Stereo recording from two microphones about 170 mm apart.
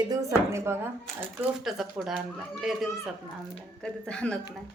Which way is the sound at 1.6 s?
Centre (ahead or behind).